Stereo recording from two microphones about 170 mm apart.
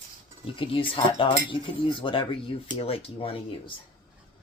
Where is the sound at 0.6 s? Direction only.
30° left (ahead or behind).